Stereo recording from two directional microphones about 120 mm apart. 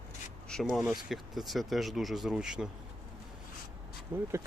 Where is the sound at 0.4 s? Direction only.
5° left (ahead or behind).